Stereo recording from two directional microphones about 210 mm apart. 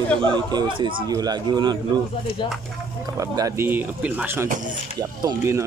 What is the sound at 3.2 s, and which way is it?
Speech, 15° right (ahead or behind).